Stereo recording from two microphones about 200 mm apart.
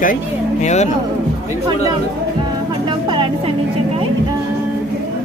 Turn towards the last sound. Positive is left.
turn(degrees=-25)  # may be behind; listen again after turning